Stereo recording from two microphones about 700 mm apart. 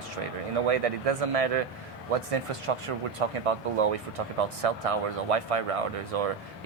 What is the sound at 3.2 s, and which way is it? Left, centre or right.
Speech, right.